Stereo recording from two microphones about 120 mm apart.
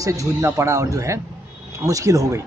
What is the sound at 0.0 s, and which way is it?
A man's voice, 30° right (ahead or behind).